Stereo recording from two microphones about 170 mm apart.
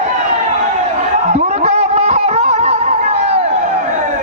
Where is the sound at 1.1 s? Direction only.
40° right (ahead or behind).